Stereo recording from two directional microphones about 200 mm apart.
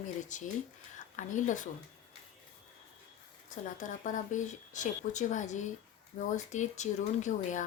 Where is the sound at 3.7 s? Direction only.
40° left (ahead or behind).